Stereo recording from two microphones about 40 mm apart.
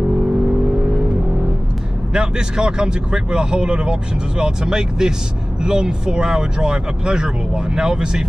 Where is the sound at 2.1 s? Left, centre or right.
Right.